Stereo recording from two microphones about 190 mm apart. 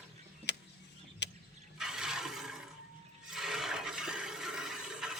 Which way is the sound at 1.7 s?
5° right (ahead or behind).